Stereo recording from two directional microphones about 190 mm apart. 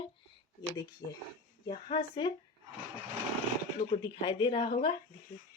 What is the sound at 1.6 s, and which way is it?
Speech, 25° left (ahead or behind).